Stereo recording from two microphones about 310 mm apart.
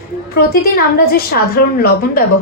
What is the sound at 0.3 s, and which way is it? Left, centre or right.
A woman's voice, left.